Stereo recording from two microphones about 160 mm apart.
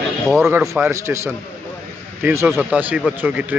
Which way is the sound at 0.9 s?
15° right (ahead or behind).